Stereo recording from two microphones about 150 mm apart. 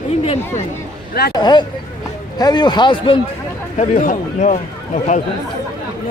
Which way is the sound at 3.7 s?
55° left (ahead or behind).